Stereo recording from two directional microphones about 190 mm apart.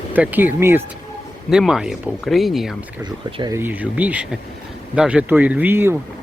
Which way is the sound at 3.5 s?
10° right (ahead or behind).